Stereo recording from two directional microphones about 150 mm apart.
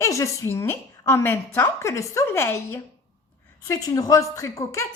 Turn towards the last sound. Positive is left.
turn(degrees=20)  # may be behind; listen again after turning